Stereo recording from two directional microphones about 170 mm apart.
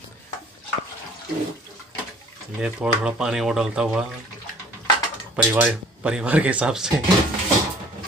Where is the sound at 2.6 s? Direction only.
5° right (ahead or behind).